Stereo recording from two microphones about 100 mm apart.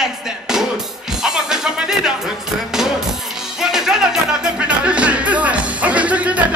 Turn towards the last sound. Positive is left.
turn(degrees=-15)  # may be behind; listen again after turning